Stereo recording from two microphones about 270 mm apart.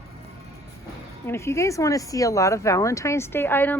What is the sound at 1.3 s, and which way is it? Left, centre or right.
Speech, centre.